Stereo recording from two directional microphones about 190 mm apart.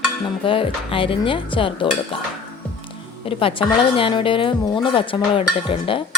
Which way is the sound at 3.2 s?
30° left (ahead or behind).